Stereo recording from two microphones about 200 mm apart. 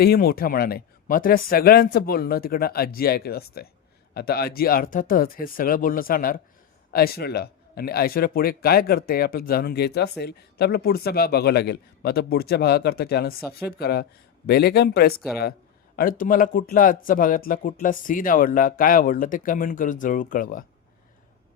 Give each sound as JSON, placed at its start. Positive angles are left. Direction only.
{"t": 0.0, "sound": "speech", "side_deg": 50}